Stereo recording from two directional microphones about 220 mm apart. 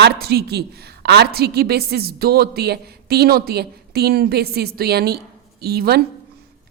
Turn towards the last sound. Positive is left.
turn(degrees=-45)  # may be behind; listen again after turning